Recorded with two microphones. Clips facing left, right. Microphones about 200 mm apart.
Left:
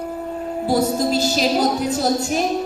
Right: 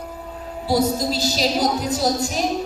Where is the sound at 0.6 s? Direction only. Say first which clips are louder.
Left 1 dB; 50° left (ahead or behind).